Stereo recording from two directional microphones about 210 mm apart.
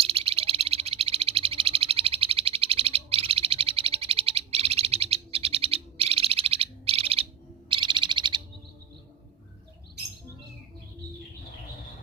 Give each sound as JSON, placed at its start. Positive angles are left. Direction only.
{"t": 0.0, "sound": "frog", "side_deg": -30}
{"t": 7.7, "sound": "owl", "side_deg": -25}